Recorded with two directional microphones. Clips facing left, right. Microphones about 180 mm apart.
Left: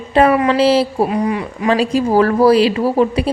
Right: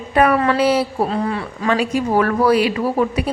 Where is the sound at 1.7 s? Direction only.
30° left (ahead or behind).